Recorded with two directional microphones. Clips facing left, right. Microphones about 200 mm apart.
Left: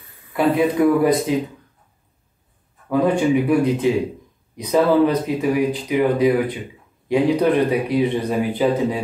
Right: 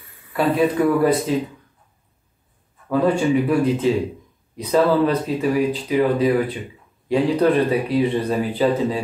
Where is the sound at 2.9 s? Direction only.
15° left (ahead or behind).